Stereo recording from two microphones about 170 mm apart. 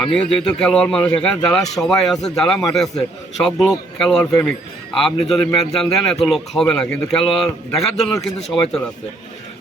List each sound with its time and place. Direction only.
0.0 s a man's voice: 5° left (ahead or behind)